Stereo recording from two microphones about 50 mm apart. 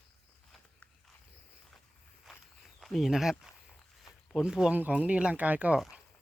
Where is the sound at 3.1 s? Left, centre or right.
Centre.